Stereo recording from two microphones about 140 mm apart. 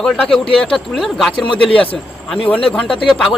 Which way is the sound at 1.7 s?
40° left (ahead or behind).